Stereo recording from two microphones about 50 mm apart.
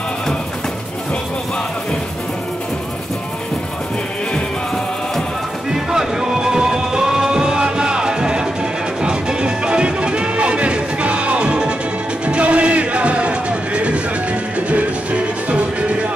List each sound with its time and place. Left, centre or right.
5.7 s music: centre
15.5 s music: right